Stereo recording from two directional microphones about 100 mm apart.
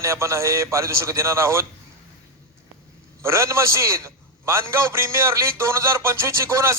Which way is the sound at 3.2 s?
30° right (ahead or behind).